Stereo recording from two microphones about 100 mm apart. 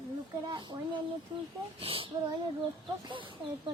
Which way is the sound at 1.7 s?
65° right (ahead or behind).